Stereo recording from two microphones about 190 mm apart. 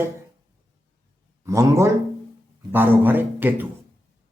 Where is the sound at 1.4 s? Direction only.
15° right (ahead or behind).